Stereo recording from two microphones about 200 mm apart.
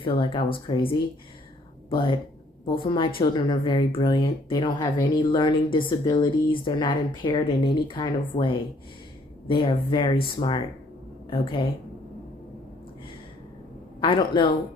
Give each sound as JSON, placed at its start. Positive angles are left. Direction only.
{"t": 0.0, "sound": "speech", "side_deg": 25}
{"t": 2.6, "sound": "speech", "side_deg": 25}
{"t": 14.0, "sound": "speech", "side_deg": 25}